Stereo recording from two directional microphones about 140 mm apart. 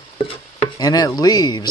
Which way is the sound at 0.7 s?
25° left (ahead or behind).